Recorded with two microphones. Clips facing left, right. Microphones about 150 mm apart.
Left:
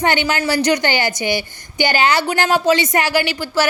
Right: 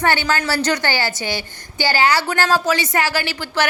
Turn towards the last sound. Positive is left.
turn(degrees=15)  # may be behind; listen again after turning